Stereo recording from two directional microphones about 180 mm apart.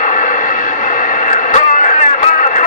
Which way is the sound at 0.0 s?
45° left (ahead or behind).